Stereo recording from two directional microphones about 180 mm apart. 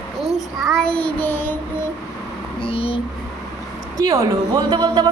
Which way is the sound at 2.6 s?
30° left (ahead or behind).